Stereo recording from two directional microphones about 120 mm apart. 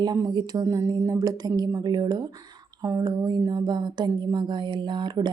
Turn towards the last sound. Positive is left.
turn(degrees=-40)  # may be behind; listen again after turning